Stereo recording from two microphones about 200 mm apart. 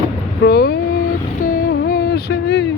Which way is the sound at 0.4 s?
50° left (ahead or behind).